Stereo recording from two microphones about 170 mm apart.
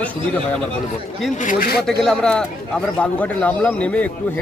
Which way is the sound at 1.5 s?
55° left (ahead or behind).